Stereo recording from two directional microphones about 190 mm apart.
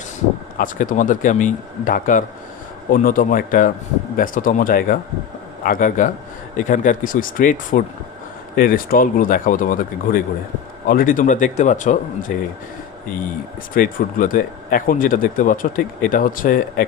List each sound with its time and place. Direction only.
0.6 s speech: 45° left (ahead or behind)
13.7 s speech: 45° left (ahead or behind)